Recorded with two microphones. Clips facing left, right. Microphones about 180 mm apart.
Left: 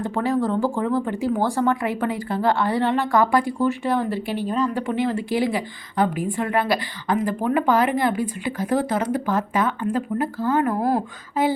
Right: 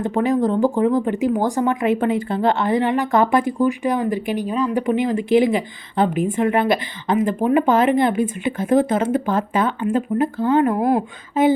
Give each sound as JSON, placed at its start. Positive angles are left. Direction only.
{"t": 0.0, "sound": "speech", "side_deg": -20}